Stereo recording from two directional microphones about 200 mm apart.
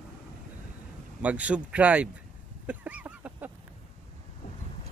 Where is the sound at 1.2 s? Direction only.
5° right (ahead or behind).